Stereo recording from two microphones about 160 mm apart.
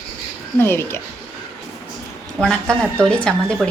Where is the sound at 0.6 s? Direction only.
15° left (ahead or behind).